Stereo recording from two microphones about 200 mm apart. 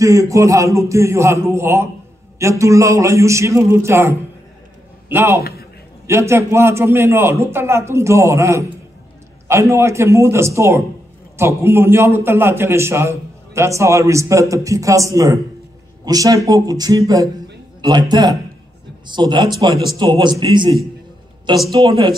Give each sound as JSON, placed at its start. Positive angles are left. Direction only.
{"t": 0.0, "sound": "a man's voice", "side_deg": -15}
{"t": 5.1, "sound": "a man's voice", "side_deg": -15}
{"t": 5.4, "sound": "a sound", "side_deg": 50}
{"t": 6.0, "sound": "a man's voice", "side_deg": -15}